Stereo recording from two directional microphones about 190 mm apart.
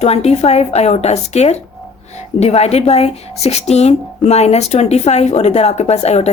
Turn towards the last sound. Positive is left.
turn(degrees=35)  # may be behind; listen again after turning